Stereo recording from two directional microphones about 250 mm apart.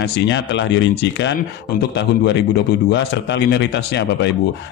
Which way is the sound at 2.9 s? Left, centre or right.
Left.